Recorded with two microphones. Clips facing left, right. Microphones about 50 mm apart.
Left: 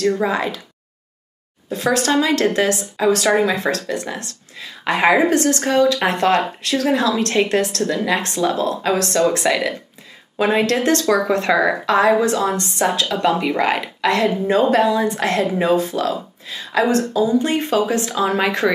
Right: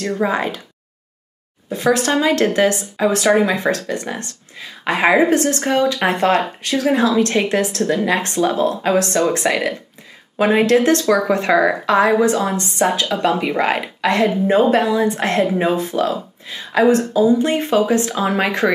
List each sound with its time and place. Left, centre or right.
0.0 s speech: centre
0.3 s speech: right
1.7 s speech: centre
5.9 s speech: centre
9.2 s speech: centre
16.8 s speech: centre